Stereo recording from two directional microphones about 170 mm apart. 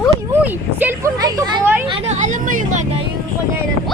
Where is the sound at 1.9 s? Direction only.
40° right (ahead or behind).